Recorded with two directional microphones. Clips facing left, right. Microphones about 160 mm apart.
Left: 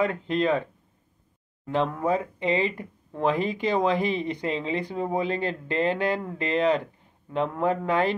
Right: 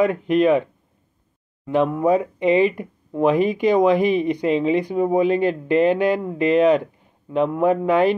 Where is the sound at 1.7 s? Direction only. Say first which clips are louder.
Right 7 dB; 15° right (ahead or behind).